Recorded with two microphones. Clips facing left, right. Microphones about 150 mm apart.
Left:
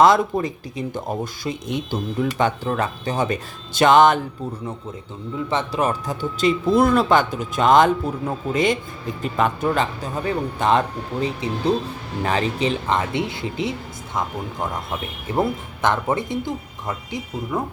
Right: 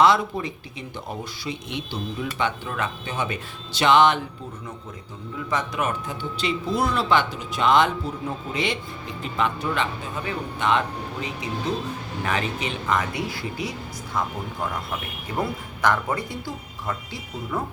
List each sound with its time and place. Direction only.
0.0 s speech: 45° left (ahead or behind)
5.5 s speech: 30° left (ahead or behind)
15.4 s speech: 25° left (ahead or behind)